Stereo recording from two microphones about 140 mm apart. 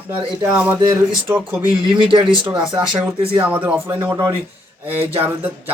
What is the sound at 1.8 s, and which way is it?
Speech, 35° right (ahead or behind).